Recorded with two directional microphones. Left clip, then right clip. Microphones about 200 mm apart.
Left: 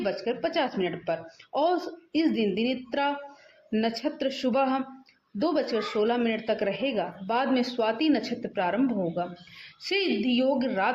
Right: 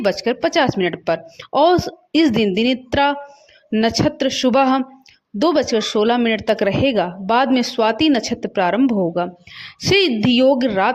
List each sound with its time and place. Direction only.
0.0 s speech: 45° right (ahead or behind)